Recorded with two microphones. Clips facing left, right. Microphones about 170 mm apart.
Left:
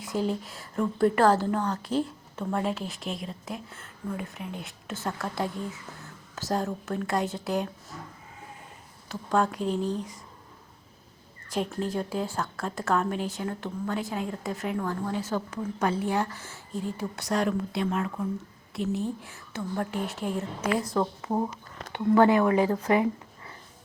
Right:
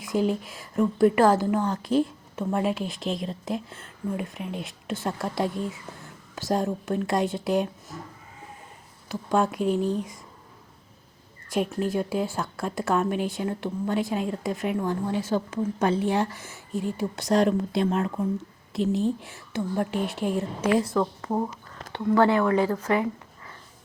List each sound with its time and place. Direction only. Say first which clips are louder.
0.1 s a woman's voice: right 4 dB; 15° right (ahead or behind)
9.0 s a woman's voice: right 2 dB; 15° right (ahead or behind)
11.5 s a woman's voice: right 4 dB; 15° right (ahead or behind); by 18.1 s 35° right (ahead or behind)
19.0 s a woman's voice: right 6 dB; 25° right (ahead or behind)
20.9 s a woman's voice: right 2 dB; 15° left (ahead or behind)
21.2 s speech: right 1 dB; centre (ahead or behind)
21.9 s speech: even; 20° left (ahead or behind)